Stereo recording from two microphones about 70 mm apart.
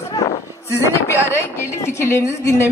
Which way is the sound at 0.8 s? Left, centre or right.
Left.